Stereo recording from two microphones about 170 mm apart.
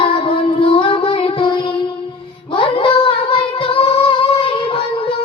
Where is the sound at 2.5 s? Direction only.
30° left (ahead or behind).